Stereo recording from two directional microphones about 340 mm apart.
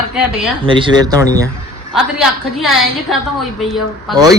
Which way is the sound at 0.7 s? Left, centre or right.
Centre.